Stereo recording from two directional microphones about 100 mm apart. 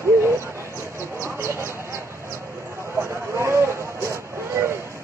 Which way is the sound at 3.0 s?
25° right (ahead or behind).